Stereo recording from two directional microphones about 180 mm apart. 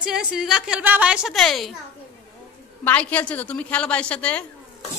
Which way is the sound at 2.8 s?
10° left (ahead or behind).